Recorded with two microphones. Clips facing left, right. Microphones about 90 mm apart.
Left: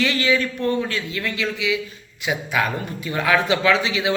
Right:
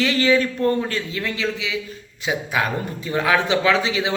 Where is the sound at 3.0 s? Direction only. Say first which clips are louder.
Even; 20° right (ahead or behind).